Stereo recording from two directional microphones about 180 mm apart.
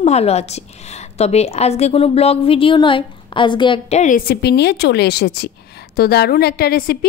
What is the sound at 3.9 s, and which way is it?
A woman's voice, 45° left (ahead or behind).